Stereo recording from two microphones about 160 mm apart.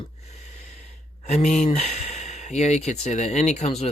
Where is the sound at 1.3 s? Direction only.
40° left (ahead or behind).